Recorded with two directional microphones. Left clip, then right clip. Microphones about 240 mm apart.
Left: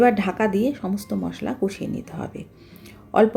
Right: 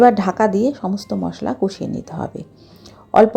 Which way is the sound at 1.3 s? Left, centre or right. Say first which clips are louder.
Right 4 dB; centre.